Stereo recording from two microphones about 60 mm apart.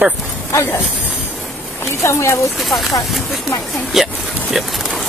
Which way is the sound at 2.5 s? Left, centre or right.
Centre.